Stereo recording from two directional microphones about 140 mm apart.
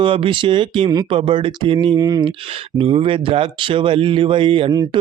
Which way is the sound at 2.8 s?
40° right (ahead or behind).